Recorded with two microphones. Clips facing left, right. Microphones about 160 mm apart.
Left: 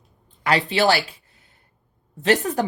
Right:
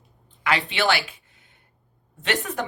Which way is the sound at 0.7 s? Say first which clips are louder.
Left 6 dB; 40° left (ahead or behind).